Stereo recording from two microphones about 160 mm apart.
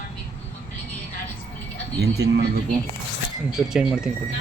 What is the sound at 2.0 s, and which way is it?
Speech, 90° right.